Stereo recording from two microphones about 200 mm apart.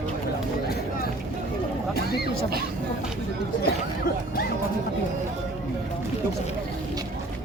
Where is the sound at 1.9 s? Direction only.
50° left (ahead or behind).